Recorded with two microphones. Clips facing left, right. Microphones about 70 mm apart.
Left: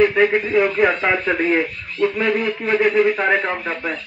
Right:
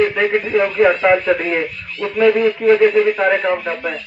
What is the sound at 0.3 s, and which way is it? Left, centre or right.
A man's voice, centre.